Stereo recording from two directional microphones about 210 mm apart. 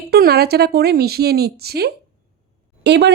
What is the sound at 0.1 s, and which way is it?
Speech, 50° right (ahead or behind).